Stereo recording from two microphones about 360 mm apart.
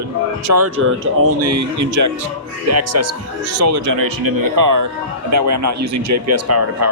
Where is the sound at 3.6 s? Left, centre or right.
Right.